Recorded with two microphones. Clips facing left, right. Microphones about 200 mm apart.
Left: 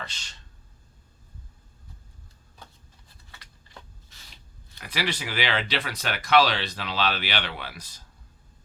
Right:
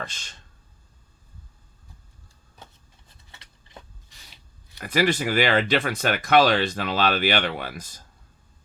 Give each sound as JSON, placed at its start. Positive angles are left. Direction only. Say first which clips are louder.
{"t": 0.0, "sound": "speech", "louder": "right 4 dB", "side_deg": -50}
{"t": 4.8, "sound": "speech", "louder": "right 9 dB", "side_deg": -45}